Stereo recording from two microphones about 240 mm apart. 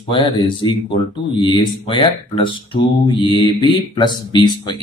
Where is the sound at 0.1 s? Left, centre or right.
Centre.